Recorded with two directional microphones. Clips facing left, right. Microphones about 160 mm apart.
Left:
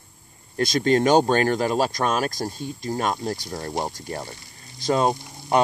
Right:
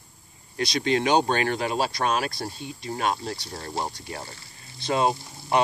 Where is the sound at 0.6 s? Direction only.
45° left (ahead or behind).